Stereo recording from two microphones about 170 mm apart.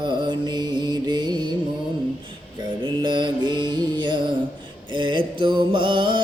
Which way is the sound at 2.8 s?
25° right (ahead or behind).